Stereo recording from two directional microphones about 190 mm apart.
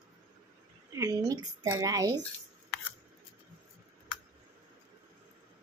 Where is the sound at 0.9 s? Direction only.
20° right (ahead or behind).